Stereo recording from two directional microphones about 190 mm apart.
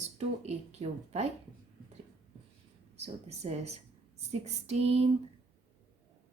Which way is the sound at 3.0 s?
35° right (ahead or behind).